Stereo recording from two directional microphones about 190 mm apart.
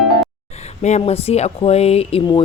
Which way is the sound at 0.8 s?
35° left (ahead or behind).